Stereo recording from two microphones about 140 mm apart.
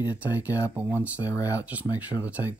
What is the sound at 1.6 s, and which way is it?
Speech, 10° right (ahead or behind).